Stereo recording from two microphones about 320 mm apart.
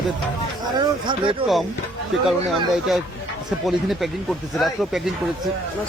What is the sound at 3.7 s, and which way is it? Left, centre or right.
Speech, centre.